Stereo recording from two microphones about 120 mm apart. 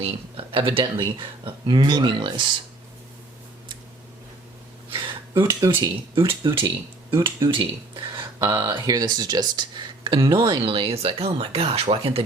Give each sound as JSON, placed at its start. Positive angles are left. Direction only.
{"t": 0.0, "sound": "speech", "side_deg": -50}
{"t": 4.9, "sound": "a sound", "side_deg": -45}
{"t": 5.3, "sound": "speech", "side_deg": -25}
{"t": 6.1, "sound": "speech", "side_deg": -45}
{"t": 7.1, "sound": "speech", "side_deg": -25}
{"t": 7.5, "sound": "speech", "side_deg": -40}